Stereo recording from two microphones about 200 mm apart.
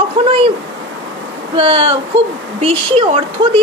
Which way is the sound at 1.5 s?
30° right (ahead or behind).